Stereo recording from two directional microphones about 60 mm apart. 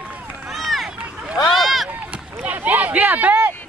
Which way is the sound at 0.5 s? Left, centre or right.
Centre.